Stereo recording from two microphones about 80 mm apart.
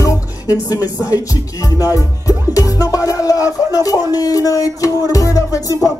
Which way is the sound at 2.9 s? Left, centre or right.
Left.